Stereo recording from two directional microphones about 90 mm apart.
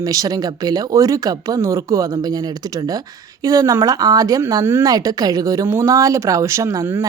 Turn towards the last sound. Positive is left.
turn(degrees=-35)  # may be behind; listen again after turning